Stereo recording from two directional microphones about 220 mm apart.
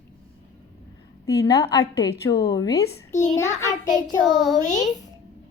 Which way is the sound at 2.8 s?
35° left (ahead or behind).